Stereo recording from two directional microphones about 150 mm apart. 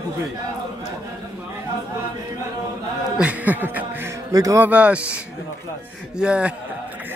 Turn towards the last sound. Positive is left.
turn(degrees=-5)  # may be behind; listen again after turning